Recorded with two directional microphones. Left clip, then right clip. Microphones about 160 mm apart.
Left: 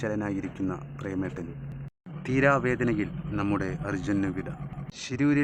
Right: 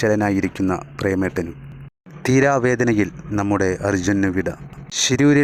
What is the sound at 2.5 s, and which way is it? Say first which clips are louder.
Speech: right 7 dB; 60° right (ahead or behind).